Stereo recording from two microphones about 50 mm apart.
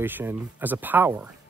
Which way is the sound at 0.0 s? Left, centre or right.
Right.